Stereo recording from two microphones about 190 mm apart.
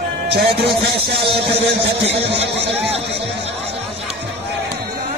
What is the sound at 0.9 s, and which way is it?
Speech, 60° right (ahead or behind).